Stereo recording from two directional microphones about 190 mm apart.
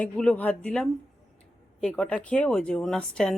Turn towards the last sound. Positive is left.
turn(degrees=5)  # may be behind; listen again after turning